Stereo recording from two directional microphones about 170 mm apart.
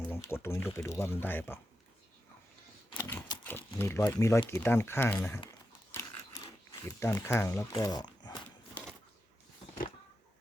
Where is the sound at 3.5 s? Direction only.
10° left (ahead or behind).